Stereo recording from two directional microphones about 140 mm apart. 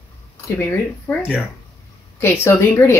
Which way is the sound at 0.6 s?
10° left (ahead or behind).